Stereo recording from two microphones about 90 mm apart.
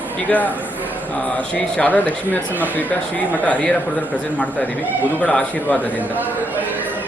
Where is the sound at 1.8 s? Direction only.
20° left (ahead or behind).